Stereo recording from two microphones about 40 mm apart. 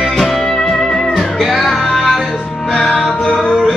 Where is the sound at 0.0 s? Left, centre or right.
Centre.